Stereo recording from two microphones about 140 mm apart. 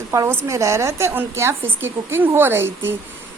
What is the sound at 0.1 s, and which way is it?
A woman's voice, 20° right (ahead or behind).